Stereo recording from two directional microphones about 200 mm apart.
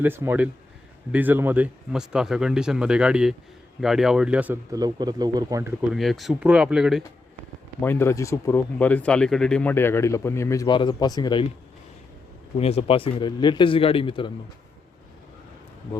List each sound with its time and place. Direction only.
0.0 s speech: 10° right (ahead or behind)
4.7 s speech: 20° right (ahead or behind)
5.9 s speech: centre (ahead or behind)
7.8 s speech: 10° left (ahead or behind)
12.5 s a man's voice: 30° left (ahead or behind)